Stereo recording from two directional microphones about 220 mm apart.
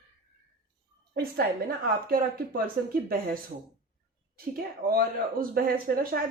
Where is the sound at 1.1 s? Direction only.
45° right (ahead or behind).